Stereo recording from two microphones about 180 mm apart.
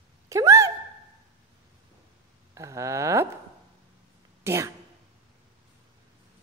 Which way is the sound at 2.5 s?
15° right (ahead or behind).